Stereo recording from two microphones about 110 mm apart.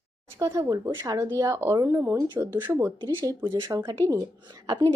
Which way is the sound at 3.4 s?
35° right (ahead or behind).